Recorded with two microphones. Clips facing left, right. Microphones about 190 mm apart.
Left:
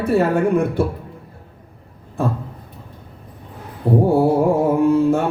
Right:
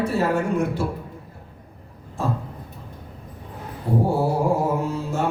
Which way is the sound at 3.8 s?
55° left (ahead or behind).